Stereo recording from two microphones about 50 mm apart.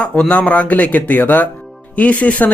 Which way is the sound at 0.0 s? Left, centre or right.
Left.